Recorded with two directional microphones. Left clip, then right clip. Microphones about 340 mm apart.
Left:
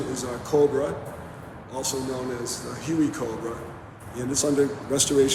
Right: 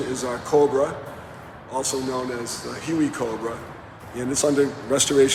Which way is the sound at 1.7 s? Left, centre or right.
Centre.